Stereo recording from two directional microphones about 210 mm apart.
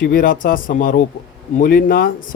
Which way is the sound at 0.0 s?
40° left (ahead or behind).